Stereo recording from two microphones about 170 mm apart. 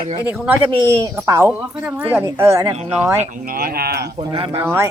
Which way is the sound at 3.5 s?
60° right (ahead or behind).